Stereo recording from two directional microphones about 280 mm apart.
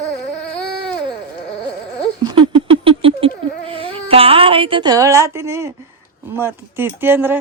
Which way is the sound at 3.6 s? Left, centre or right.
Centre.